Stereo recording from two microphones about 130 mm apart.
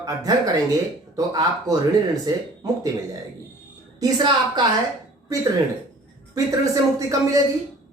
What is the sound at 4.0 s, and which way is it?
Speech, 35° right (ahead or behind).